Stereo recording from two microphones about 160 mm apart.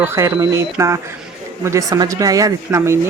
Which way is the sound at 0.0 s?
15° right (ahead or behind).